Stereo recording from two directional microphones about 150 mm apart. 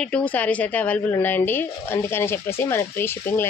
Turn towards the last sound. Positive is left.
turn(degrees=15)  # may be behind; listen again after turning